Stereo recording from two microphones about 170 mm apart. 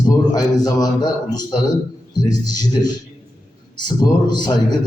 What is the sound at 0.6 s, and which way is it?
Speech, 25° left (ahead or behind).